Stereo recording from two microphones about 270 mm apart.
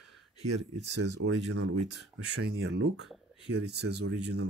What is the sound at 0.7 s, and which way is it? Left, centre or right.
Speech, right.